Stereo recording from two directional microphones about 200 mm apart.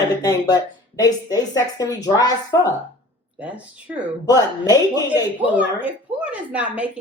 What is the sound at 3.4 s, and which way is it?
Speech, 5° right (ahead or behind).